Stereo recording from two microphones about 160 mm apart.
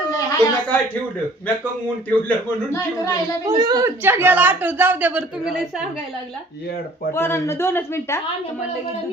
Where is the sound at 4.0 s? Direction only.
15° right (ahead or behind).